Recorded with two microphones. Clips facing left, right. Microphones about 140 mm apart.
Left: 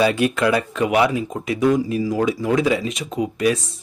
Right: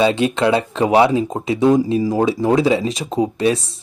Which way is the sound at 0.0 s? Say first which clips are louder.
Right 2 dB; 25° right (ahead or behind).